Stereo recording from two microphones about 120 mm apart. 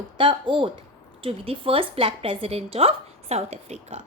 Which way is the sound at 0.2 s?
45° right (ahead or behind).